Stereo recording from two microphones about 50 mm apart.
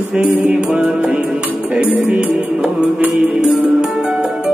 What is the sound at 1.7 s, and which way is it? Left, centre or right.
Music, right.